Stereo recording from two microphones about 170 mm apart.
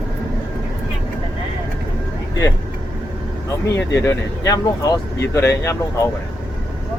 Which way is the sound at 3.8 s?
15° left (ahead or behind).